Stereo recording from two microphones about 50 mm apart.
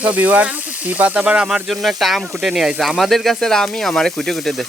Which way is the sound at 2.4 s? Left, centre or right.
Centre.